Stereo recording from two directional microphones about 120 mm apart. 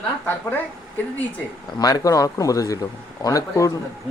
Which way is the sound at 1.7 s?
30° left (ahead or behind).